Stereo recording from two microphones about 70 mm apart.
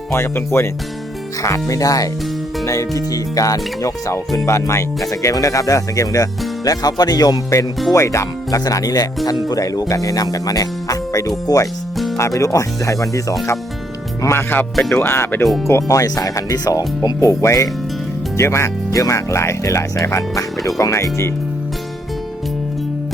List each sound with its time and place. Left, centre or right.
0.1 s speech: left
1.4 s speech: left
4.4 s speech: left
6.7 s speech: left
7.9 s speech: left
12.1 s speech: left
15.6 s speech: left